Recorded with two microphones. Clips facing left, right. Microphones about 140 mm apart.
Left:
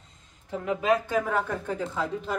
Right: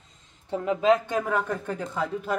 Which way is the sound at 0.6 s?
25° right (ahead or behind).